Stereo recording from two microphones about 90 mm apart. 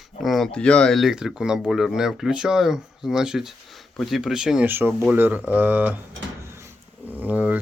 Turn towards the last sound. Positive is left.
turn(degrees=-15)  # may be behind; listen again after turning